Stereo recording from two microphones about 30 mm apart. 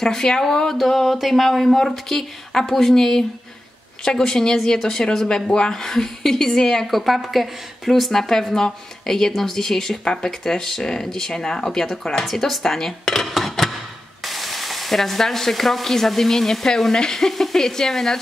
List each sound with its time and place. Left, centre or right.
0.0 s speech: centre
0.7 s speech: centre
6.9 s speech: centre
8.1 s speech: centre
13.4 s a sound: centre
14.2 s speech: centre; by 17.3 s left
17.3 s speech: centre